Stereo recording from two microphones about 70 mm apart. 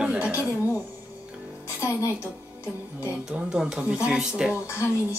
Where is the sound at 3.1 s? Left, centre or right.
Centre.